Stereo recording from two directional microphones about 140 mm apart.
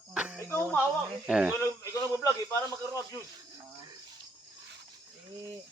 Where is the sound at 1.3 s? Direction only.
5° right (ahead or behind).